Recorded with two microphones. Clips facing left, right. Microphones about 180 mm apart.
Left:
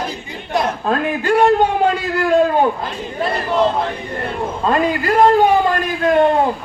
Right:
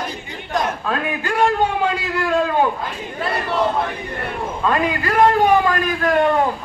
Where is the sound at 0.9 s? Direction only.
40° left (ahead or behind).